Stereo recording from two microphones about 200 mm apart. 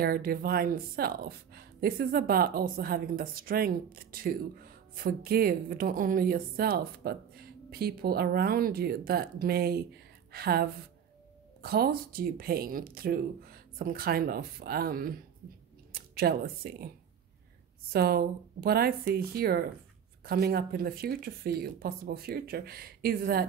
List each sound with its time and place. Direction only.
0.0 s speech: 50° right (ahead or behind)
17.9 s speech: 50° right (ahead or behind)